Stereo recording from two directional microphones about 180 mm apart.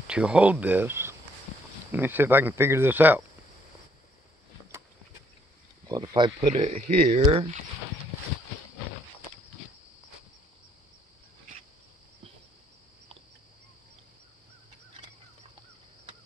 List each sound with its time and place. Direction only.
0.0 s speech: 5° right (ahead or behind)
5.9 s speech: 25° right (ahead or behind)